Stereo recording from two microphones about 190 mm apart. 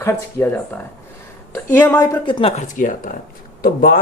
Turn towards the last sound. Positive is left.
turn(degrees=50)  # may be behind; listen again after turning